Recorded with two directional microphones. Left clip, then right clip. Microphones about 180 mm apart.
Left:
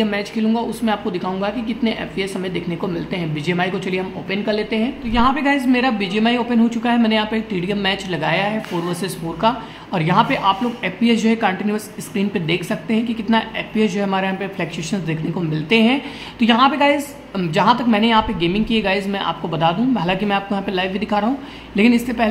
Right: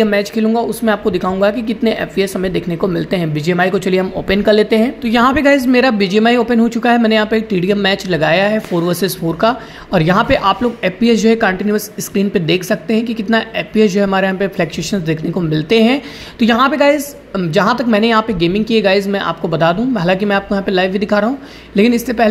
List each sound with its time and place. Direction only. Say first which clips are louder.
0.0 s speech: right 7 dB; 30° right (ahead or behind)